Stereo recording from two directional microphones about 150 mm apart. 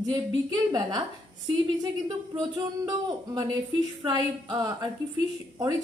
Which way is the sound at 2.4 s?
25° right (ahead or behind).